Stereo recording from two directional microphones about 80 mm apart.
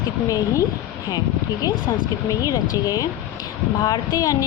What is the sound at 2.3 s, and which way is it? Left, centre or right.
A woman's voice, left.